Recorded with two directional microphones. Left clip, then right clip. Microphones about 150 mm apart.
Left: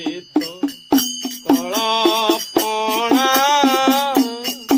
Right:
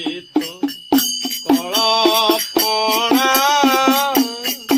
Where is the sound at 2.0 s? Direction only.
20° left (ahead or behind).